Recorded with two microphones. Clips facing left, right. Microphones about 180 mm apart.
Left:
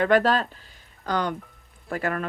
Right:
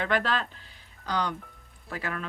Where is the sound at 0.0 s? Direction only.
45° left (ahead or behind).